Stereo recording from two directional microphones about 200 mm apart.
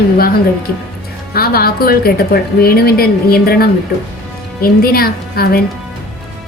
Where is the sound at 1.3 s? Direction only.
50° left (ahead or behind).